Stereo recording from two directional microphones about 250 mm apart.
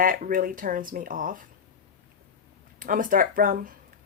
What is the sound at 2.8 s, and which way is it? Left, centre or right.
Speech, right.